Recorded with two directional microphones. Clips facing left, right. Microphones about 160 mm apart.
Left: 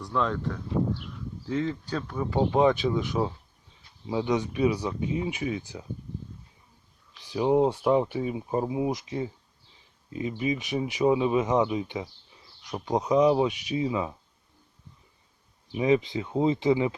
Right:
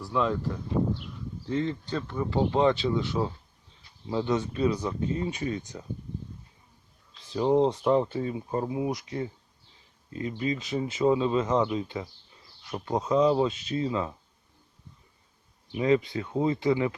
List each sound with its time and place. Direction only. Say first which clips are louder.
0.0 s speech: right 1 dB; 5° right (ahead or behind)
7.3 s speech: even; 10° left (ahead or behind)
15.8 s speech: left 1 dB; 20° left (ahead or behind)